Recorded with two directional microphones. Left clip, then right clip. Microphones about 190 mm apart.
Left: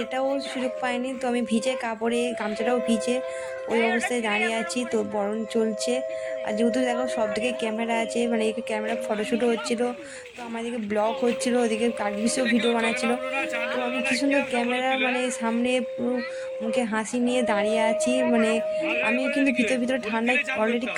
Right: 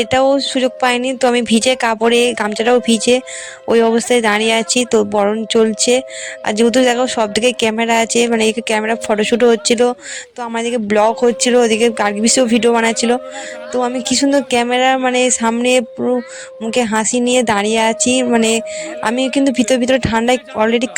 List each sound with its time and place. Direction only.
0.0 s speech: 50° right (ahead or behind)